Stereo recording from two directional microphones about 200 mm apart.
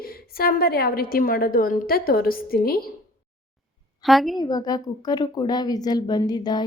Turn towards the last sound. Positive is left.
turn(degrees=20)  # may be behind; listen again after turning